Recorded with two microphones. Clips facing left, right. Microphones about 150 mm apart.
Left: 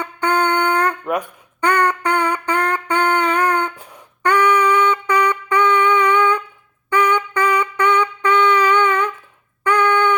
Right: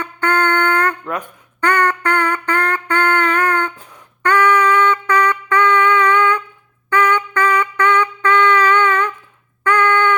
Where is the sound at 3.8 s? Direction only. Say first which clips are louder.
Even; 15° left (ahead or behind).